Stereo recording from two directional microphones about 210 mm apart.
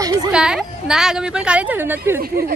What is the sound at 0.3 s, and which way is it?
Speech, 5° right (ahead or behind).